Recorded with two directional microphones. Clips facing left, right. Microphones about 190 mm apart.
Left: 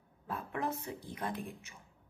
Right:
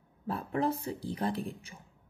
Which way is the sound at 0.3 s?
35° right (ahead or behind).